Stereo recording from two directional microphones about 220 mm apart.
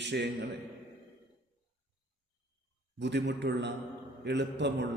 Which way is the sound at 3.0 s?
50° right (ahead or behind).